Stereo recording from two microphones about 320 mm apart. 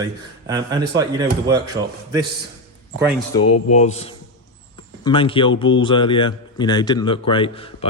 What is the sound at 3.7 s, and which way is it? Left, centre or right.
Speech, left.